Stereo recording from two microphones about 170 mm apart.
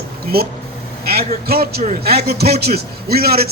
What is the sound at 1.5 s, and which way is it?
A man's voice, 65° right (ahead or behind).